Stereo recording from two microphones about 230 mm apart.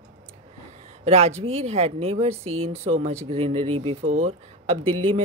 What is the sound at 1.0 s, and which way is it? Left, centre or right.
Speech, right.